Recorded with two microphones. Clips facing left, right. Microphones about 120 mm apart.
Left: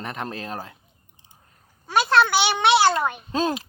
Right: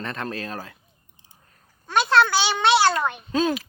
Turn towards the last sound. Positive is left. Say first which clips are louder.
# right 1 dB
turn(degrees=30)  # may be behind; listen again after turning